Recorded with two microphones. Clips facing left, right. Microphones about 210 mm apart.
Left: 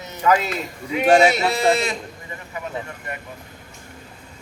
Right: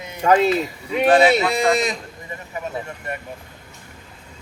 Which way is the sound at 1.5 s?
15° right (ahead or behind).